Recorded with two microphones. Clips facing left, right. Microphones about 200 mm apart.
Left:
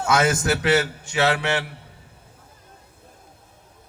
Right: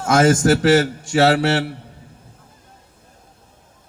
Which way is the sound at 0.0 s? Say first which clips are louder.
Right 6 dB; 50° right (ahead or behind).